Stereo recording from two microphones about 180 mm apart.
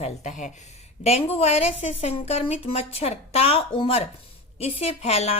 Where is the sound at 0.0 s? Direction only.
40° left (ahead or behind).